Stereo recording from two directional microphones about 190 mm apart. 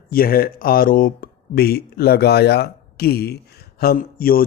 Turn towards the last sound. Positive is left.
turn(degrees=50)  # may be behind; listen again after turning